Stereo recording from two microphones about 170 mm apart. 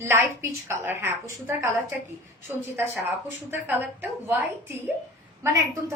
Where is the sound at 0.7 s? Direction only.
15° right (ahead or behind).